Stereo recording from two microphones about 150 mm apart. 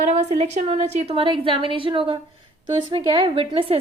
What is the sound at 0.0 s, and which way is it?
A woman's voice, 50° right (ahead or behind).